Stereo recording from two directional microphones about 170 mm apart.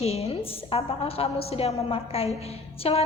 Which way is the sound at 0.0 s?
35° left (ahead or behind).